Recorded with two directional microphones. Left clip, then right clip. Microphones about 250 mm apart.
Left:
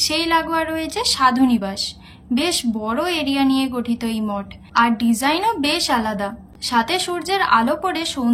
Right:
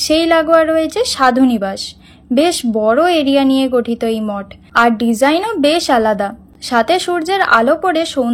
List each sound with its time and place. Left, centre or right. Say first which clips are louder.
0.0 s a woman's voice: right 6 dB; centre